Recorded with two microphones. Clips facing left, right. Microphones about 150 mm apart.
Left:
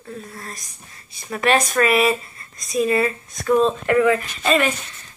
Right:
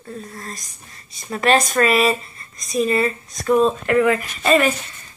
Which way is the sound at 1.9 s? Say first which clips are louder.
Even; 5° left (ahead or behind).